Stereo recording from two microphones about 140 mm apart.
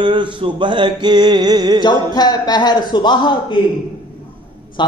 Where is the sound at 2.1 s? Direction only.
30° left (ahead or behind).